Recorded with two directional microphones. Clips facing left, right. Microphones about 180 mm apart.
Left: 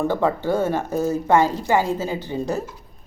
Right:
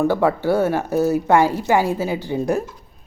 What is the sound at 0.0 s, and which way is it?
Speech, 10° right (ahead or behind).